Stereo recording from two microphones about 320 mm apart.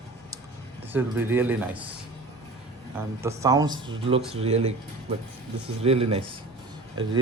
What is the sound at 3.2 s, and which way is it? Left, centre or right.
Speech, centre.